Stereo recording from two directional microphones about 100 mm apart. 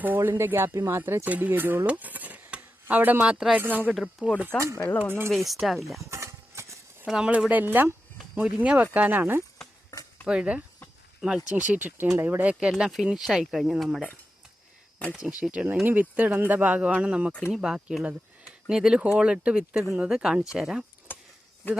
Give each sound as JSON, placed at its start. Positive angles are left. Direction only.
{"t": 0.0, "sound": "speech", "side_deg": -20}
{"t": 4.5, "sound": "speech", "side_deg": -30}
{"t": 5.3, "sound": "speech", "side_deg": 0}
{"t": 6.1, "sound": "a sound", "side_deg": -30}
{"t": 7.1, "sound": "speech", "side_deg": -10}
{"t": 9.9, "sound": "a sound", "side_deg": 30}
{"t": 10.2, "sound": "speech", "side_deg": -10}
{"t": 11.5, "sound": "speech", "side_deg": -15}
{"t": 15.1, "sound": "speech", "side_deg": -10}
{"t": 21.1, "sound": "a sound", "side_deg": 20}